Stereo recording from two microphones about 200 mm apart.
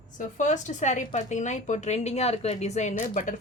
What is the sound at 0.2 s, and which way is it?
Speech, 40° left (ahead or behind).